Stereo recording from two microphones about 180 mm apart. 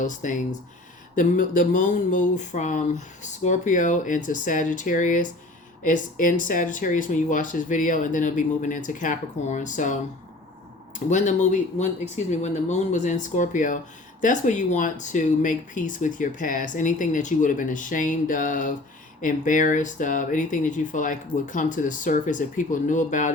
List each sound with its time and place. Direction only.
0.0 s speech: 45° left (ahead or behind)
11.1 s speech: 45° left (ahead or behind)